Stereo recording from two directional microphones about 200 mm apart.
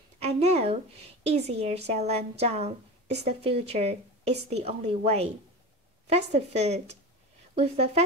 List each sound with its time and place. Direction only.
0.2 s a woman's voice: 35° right (ahead or behind)